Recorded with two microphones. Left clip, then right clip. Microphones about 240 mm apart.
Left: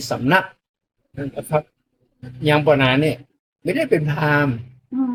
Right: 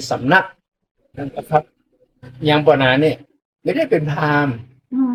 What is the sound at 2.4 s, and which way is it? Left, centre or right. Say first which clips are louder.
Speech: right 2 dB; left.